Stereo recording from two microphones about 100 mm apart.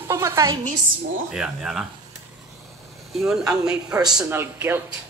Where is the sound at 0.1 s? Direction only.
25° right (ahead or behind).